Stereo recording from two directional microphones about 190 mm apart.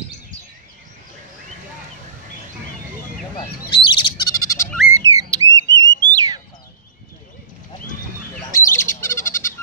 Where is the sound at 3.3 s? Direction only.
25° left (ahead or behind).